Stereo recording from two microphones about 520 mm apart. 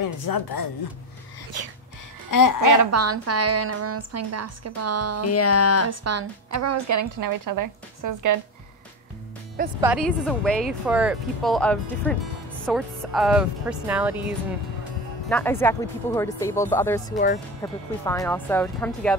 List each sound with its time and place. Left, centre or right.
0.0 s speech: left
2.3 s speech: left
2.8 s a woman's voice: right
5.2 s speech: left
5.9 s a woman's voice: right
9.6 s speech: centre
15.2 s speech: centre